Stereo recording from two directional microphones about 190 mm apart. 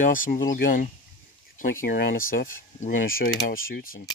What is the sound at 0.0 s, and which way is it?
Speech, 45° left (ahead or behind).